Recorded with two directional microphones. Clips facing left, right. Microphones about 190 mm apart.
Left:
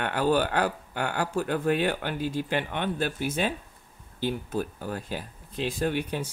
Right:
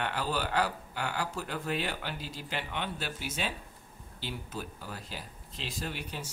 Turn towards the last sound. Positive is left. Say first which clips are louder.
# left 11 dB
turn(degrees=55)  # may be behind; listen again after turning